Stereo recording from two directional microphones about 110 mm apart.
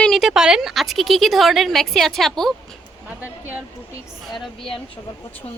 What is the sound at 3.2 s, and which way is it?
Speech, 15° right (ahead or behind).